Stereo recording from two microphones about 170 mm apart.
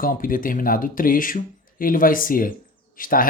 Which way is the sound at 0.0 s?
55° left (ahead or behind).